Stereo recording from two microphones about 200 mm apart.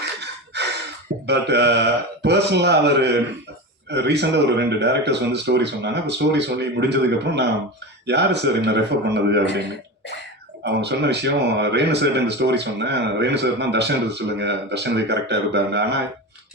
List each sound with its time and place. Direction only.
0.5 s gasp: 55° right (ahead or behind)
1.3 s speech: 55° right (ahead or behind)
10.6 s speech: 60° right (ahead or behind)